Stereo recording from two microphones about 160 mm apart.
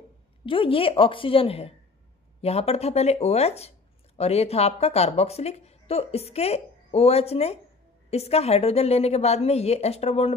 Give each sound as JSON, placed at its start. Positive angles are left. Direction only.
{"t": 0.5, "sound": "a woman's voice", "side_deg": 35}